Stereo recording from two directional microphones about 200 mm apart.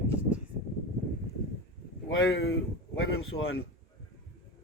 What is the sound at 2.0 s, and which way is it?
Speech, 80° left.